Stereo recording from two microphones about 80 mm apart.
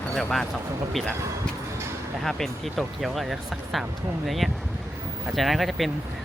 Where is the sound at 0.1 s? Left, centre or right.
Centre.